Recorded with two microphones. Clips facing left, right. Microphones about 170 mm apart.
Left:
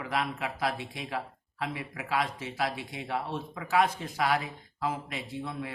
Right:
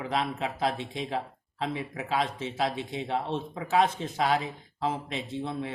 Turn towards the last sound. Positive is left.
turn(degrees=-25)  # may be behind; listen again after turning